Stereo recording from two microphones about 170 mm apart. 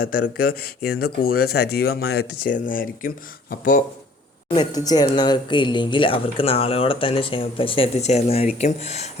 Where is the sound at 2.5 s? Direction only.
55° left (ahead or behind).